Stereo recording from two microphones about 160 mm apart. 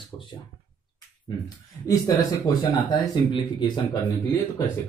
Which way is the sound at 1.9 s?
25° left (ahead or behind).